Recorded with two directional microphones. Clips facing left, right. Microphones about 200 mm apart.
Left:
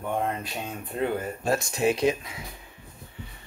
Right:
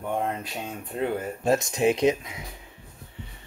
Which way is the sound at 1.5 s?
20° right (ahead or behind).